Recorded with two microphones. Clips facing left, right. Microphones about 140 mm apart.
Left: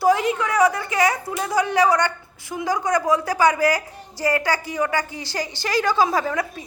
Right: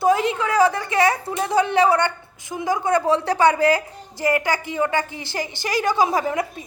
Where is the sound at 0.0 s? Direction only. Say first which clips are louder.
Even; 25° right (ahead or behind).